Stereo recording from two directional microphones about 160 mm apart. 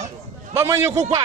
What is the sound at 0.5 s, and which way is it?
Speech, 15° right (ahead or behind).